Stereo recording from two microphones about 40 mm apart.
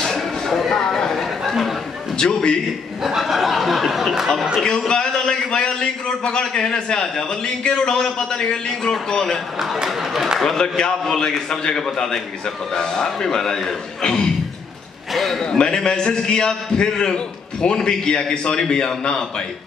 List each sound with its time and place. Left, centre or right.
0.0 s a sound: centre
1.1 s a sound: centre
2.1 s a man's voice: left
3.2 s speech: centre
4.6 s a man's voice: centre
9.8 s speech: centre
10.6 s a man's voice: centre
15.1 s a sound: centre
15.5 s a man's voice: left